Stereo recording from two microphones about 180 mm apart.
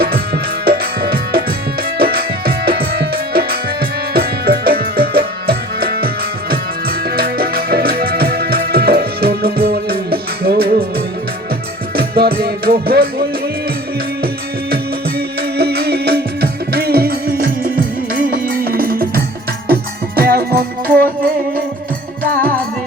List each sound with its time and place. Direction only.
0.6 s music: 55° right (ahead or behind)
15.4 s music: 60° right (ahead or behind)
20.9 s music: 5° left (ahead or behind)